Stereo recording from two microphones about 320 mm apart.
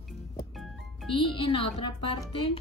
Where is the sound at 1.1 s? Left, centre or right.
Centre.